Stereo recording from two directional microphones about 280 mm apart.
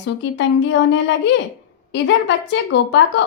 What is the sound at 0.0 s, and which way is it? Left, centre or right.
Speech, left.